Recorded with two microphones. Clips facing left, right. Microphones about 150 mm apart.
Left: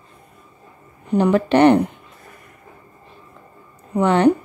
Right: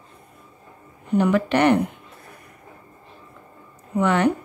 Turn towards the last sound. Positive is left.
turn(degrees=30)  # may be behind; listen again after turning